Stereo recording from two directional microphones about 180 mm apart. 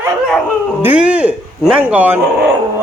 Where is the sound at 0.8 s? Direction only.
10° right (ahead or behind).